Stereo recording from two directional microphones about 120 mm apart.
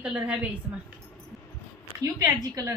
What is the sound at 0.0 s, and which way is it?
Speech, 10° right (ahead or behind).